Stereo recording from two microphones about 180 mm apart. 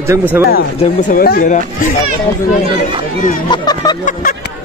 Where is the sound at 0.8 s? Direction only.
45° left (ahead or behind).